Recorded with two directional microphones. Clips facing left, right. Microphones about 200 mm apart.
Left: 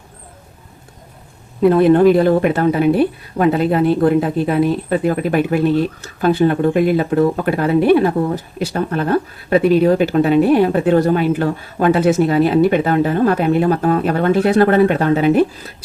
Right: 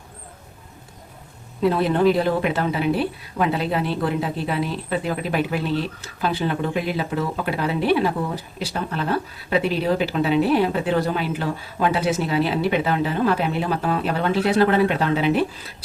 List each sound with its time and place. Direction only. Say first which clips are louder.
1.6 s speech: left 8 dB; 55° left (ahead or behind)